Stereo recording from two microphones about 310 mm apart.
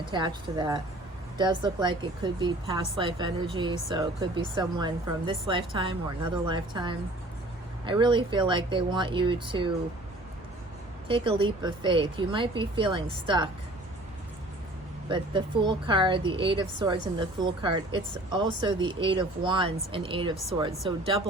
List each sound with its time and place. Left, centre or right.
0.0 s a woman's voice: centre
11.1 s a woman's voice: centre
15.1 s a woman's voice: centre